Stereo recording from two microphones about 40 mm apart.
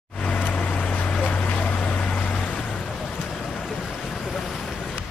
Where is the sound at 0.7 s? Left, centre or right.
Left.